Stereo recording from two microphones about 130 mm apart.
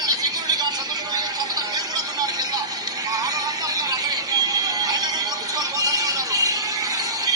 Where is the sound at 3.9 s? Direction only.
30° right (ahead or behind).